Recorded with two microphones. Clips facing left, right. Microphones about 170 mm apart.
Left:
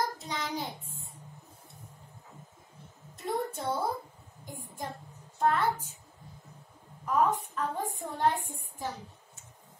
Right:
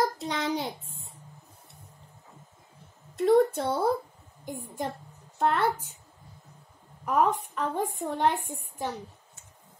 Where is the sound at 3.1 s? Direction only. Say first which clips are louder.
Right 12 dB; 75° right (ahead or behind).